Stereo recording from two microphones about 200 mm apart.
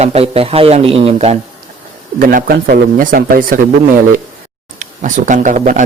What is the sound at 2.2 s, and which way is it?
Speech, 45° right (ahead or behind).